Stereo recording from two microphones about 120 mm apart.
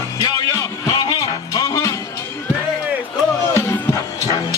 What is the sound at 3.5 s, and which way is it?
Music, 20° left (ahead or behind).